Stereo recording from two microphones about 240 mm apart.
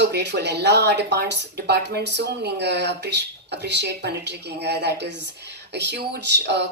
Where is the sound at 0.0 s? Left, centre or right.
Right.